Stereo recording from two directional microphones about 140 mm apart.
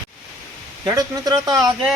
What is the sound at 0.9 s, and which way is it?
Speech, 25° right (ahead or behind).